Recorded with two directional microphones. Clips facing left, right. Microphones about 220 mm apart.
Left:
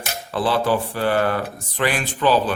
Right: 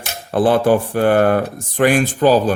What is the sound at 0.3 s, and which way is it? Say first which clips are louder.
A man's voice: right 7 dB; 50° right (ahead or behind).